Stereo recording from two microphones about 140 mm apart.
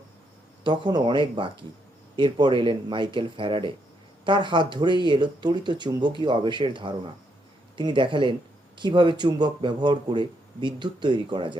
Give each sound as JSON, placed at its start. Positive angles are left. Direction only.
{"t": 0.6, "sound": "speech", "side_deg": -30}